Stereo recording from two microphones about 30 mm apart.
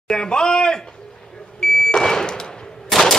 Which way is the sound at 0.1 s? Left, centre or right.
Left.